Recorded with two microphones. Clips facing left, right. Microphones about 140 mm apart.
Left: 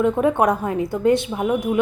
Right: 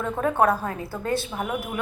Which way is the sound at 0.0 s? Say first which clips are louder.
Left 5 dB; 15° left (ahead or behind).